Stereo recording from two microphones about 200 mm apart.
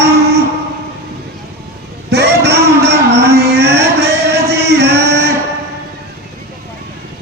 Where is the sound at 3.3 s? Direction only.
55° right (ahead or behind).